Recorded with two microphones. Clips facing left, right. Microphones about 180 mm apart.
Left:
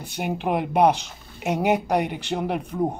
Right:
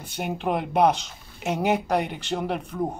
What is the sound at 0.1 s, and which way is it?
A man's voice, 5° left (ahead or behind).